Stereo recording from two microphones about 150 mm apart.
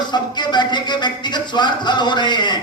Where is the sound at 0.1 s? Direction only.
30° left (ahead or behind).